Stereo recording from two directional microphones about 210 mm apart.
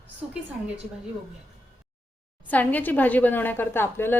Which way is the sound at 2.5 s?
10° left (ahead or behind).